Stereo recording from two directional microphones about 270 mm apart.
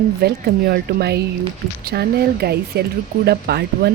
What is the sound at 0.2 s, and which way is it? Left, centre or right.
Speech, right.